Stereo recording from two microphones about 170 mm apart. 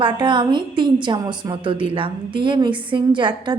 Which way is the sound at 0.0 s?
30° right (ahead or behind).